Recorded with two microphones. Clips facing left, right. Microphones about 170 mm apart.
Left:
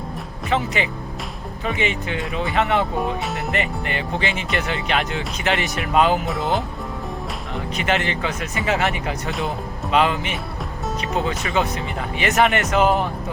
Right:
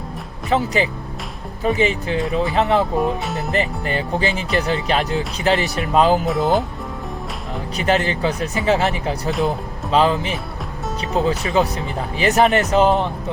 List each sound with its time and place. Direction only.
0.5 s speech: 35° right (ahead or behind)
3.0 s speech: centre (ahead or behind)
3.5 s speech: 35° right (ahead or behind)
6.2 s speech: centre (ahead or behind)
7.8 s speech: 35° right (ahead or behind)